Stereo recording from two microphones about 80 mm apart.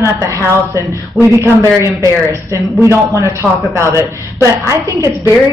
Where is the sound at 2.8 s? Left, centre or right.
Right.